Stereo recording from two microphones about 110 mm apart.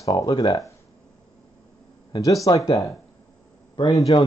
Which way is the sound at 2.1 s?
35° left (ahead or behind).